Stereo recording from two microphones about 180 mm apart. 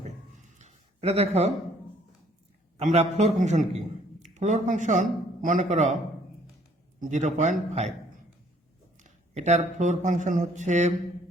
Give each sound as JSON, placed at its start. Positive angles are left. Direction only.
{"t": 0.6, "sound": "a sound", "side_deg": -35}
{"t": 2.7, "sound": "a man's voice", "side_deg": -35}
{"t": 7.0, "sound": "a man's voice", "side_deg": -45}
{"t": 9.0, "sound": "speech", "side_deg": -40}